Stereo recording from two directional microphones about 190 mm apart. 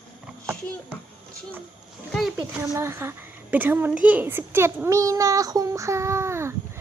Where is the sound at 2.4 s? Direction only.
15° right (ahead or behind).